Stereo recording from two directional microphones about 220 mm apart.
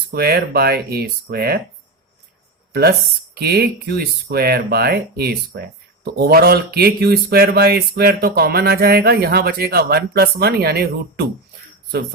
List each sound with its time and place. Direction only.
0.1 s speech: 45° right (ahead or behind)
3.3 s speech: 45° right (ahead or behind)